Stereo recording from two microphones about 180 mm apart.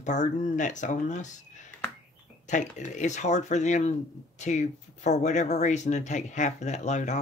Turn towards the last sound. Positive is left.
turn(degrees=40)  # may be behind; listen again after turning